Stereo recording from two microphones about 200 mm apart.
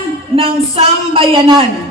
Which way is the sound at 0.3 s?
25° right (ahead or behind).